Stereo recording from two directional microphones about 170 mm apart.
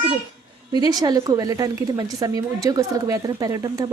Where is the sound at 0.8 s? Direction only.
25° right (ahead or behind).